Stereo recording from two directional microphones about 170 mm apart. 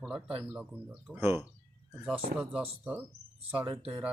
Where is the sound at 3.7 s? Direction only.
30° right (ahead or behind).